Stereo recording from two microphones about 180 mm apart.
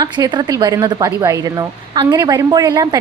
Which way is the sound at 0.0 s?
25° right (ahead or behind).